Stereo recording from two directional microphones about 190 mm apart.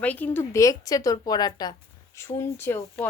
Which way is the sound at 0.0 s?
10° left (ahead or behind).